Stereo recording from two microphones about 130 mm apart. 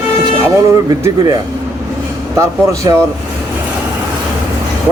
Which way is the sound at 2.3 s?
25° right (ahead or behind).